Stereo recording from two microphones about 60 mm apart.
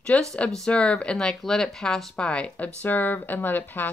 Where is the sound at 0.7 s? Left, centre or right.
Centre.